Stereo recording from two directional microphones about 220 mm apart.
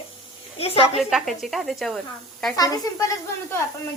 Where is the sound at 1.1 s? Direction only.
Centre (ahead or behind).